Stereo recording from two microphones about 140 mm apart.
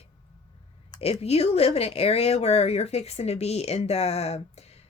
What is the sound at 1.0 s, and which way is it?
Speech, 45° left (ahead or behind).